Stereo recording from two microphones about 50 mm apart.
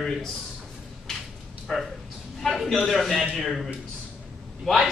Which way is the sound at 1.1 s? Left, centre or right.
Centre.